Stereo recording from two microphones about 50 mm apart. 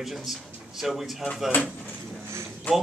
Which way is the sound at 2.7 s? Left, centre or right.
Left.